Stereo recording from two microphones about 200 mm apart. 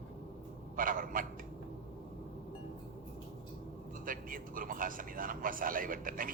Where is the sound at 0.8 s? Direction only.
45° right (ahead or behind).